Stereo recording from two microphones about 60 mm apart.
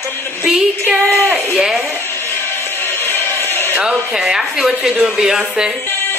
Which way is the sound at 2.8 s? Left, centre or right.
Left.